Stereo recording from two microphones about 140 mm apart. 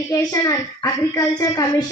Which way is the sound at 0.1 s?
25° left (ahead or behind).